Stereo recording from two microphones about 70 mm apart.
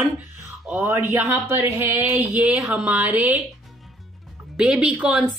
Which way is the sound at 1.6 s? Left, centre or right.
Right.